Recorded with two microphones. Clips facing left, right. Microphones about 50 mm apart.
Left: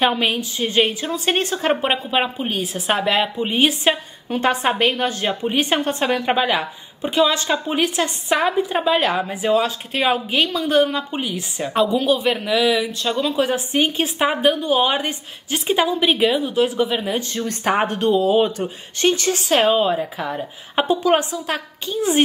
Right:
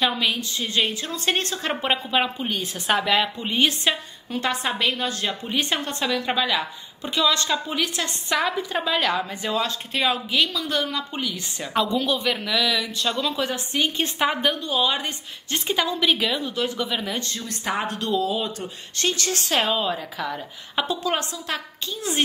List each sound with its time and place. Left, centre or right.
0.0 s a woman's voice: left; by 3.9 s centre
4.3 s a woman's voice: left
6.2 s a woman's voice: left; by 10.0 s centre
10.0 s a woman's voice: left
11.7 s a woman's voice: centre
12.5 s a woman's voice: left
12.8 s a woman's voice: centre
14.0 s a woman's voice: centre
14.7 s a woman's voice: left
17.3 s a woman's voice: left
17.8 s a woman's voice: left
19.4 s a woman's voice: centre